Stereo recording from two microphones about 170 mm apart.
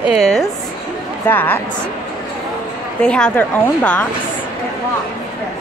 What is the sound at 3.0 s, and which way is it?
A woman's voice, 5° left (ahead or behind).